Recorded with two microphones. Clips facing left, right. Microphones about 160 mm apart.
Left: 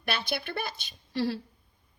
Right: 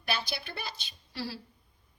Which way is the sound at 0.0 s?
55° left (ahead or behind).